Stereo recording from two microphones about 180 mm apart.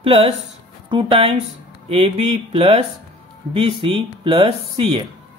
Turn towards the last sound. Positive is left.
turn(degrees=-30)  # may be behind; listen again after turning